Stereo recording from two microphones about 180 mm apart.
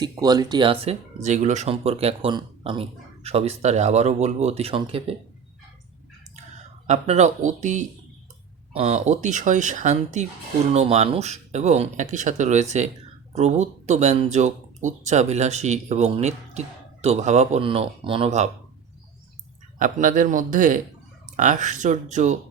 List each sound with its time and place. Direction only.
0.0 s speech: 20° right (ahead or behind)
6.8 s speech: 40° right (ahead or behind)
19.8 s speech: 50° right (ahead or behind)